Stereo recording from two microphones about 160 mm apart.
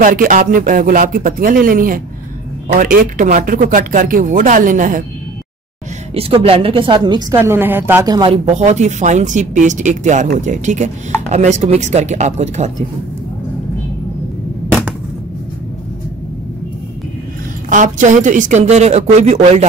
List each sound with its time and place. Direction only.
0.0 s speech: 60° right (ahead or behind)
6.1 s a woman's voice: 35° right (ahead or behind)
7.3 s a woman's voice: 15° right (ahead or behind)
8.1 s speech: 30° right (ahead or behind)
8.5 s a woman's voice: 45° right (ahead or behind)
17.6 s a woman's voice: 55° right (ahead or behind)